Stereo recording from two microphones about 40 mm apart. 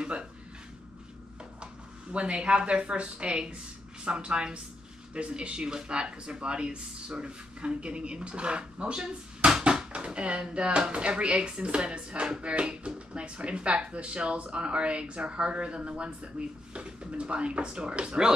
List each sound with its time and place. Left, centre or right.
0.0 s a sound: right
2.1 s speech: right
9.5 s bouncing: centre
10.5 s speech: right